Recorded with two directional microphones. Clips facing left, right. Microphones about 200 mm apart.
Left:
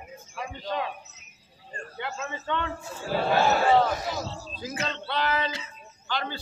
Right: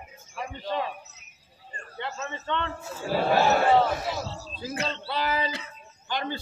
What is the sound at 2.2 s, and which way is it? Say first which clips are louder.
A man's voice: even; 10° left (ahead or behind).